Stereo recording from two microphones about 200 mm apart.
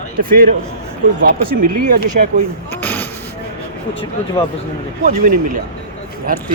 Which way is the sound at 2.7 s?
10° left (ahead or behind).